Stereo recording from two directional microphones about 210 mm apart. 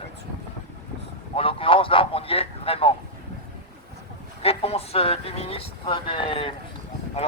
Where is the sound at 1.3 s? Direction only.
25° left (ahead or behind).